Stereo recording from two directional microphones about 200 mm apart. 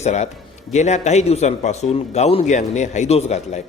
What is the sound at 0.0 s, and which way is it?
Speech, 35° left (ahead or behind).